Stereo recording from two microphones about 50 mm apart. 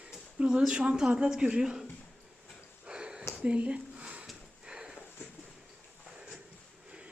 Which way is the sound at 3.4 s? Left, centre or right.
Right.